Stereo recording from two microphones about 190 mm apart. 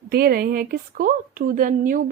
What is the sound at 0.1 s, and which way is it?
A woman's voice, 55° right (ahead or behind).